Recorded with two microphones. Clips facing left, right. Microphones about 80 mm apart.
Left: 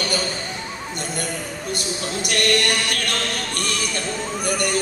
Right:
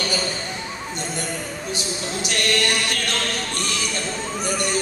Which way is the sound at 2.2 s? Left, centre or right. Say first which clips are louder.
Left 2 dB; left.